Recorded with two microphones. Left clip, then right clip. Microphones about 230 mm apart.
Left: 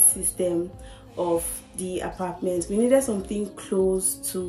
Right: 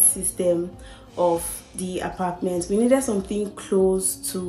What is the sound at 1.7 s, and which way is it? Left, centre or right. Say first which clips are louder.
Speech: right 2 dB; centre.